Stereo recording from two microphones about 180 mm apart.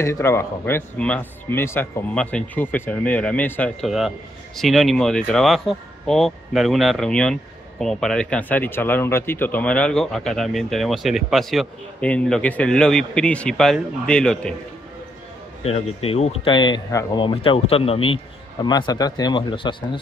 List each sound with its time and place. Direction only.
0.0 s speech: 15° left (ahead or behind)
3.8 s speech: 5° right (ahead or behind)
15.6 s speech: 35° left (ahead or behind)